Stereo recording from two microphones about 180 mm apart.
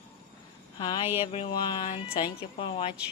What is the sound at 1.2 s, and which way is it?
Speech, 35° left (ahead or behind).